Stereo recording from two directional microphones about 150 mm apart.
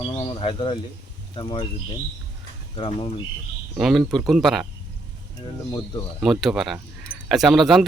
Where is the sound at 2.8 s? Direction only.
35° left (ahead or behind).